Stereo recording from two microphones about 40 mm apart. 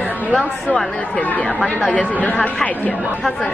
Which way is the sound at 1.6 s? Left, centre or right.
Left.